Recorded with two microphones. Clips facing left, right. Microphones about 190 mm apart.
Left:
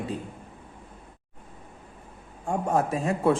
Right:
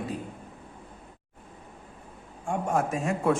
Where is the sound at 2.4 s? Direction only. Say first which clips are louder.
Left 2 dB; 35° left (ahead or behind).